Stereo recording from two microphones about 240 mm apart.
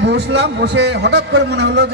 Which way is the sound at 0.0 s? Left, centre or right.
Right.